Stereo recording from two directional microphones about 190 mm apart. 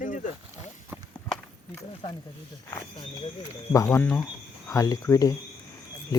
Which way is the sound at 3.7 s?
15° left (ahead or behind).